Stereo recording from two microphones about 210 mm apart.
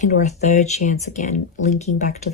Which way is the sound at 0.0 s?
35° left (ahead or behind).